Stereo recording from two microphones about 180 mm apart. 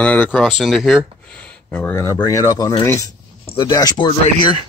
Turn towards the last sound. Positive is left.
turn(degrees=25)  # may be behind; listen again after turning